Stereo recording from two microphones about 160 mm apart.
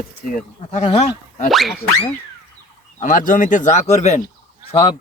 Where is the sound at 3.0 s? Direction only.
55° left (ahead or behind).